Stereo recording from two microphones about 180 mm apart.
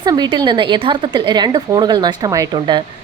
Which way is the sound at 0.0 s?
25° right (ahead or behind).